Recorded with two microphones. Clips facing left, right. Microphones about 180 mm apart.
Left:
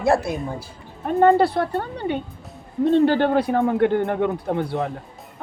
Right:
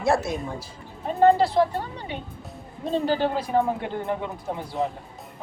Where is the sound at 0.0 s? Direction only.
60° left (ahead or behind).